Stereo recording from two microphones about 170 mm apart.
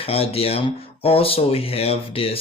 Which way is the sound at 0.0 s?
35° left (ahead or behind).